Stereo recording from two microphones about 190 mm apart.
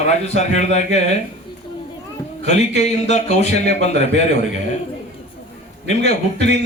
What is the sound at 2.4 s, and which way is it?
A man's voice, 35° left (ahead or behind).